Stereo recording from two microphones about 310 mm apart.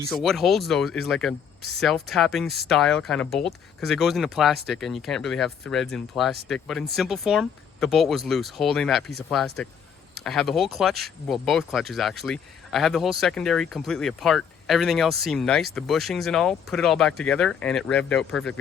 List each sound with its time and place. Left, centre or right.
0.0 s speech: centre